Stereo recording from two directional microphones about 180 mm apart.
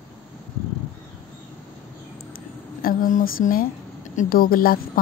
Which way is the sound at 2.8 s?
50° left (ahead or behind).